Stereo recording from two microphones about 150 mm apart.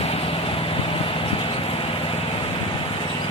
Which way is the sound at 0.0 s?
40° left (ahead or behind).